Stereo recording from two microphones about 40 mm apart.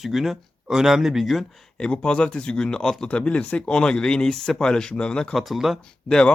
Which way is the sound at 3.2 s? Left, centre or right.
Left.